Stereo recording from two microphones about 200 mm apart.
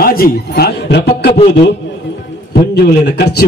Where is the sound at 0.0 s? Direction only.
45° left (ahead or behind).